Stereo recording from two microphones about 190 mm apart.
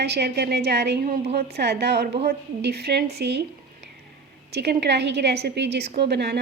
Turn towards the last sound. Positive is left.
turn(degrees=-60)  # may be behind; listen again after turning